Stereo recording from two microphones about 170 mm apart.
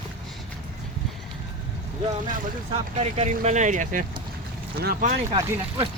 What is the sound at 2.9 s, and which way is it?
Speech, 40° right (ahead or behind).